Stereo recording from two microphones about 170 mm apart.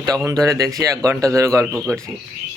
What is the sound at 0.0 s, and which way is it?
Speech, 20° right (ahead or behind).